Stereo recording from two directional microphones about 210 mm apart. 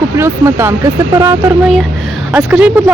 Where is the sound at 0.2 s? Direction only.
10° right (ahead or behind).